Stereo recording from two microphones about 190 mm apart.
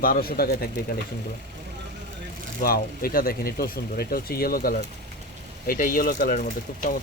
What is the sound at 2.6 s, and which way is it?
Speech, 50° left (ahead or behind).